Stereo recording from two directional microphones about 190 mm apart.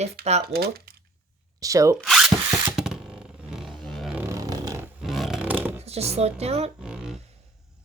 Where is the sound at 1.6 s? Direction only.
15° right (ahead or behind).